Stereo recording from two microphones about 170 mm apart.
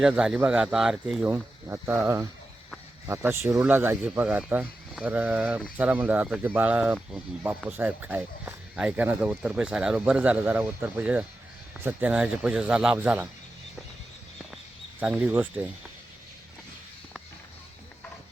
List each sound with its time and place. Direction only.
0.0 s speech: 5° right (ahead or behind)
15.0 s speech: 10° right (ahead or behind)